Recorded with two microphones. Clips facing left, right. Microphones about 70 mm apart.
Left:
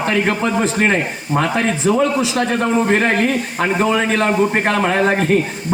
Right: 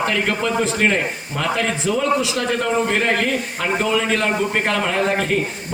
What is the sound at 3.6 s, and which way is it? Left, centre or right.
A man's voice, left.